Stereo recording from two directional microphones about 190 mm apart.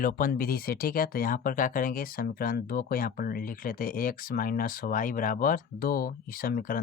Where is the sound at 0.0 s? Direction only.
45° left (ahead or behind).